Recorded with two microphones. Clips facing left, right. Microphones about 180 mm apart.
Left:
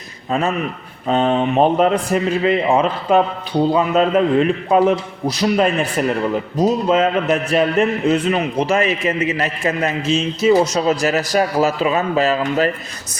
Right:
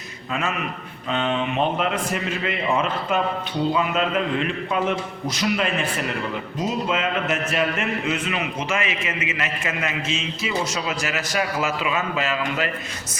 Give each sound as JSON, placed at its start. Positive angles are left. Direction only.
{"t": 0.3, "sound": "a man's voice", "side_deg": 40}